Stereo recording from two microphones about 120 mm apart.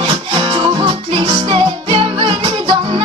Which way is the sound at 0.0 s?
45° right (ahead or behind).